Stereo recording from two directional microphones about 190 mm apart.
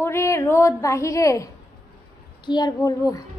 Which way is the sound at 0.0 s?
15° left (ahead or behind).